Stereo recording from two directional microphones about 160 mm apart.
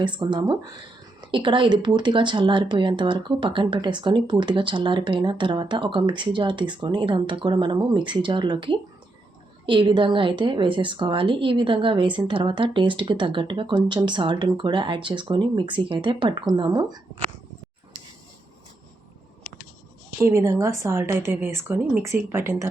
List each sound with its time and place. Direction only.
0.0 s speech: 30° right (ahead or behind)
20.1 s a woman's voice: 20° right (ahead or behind)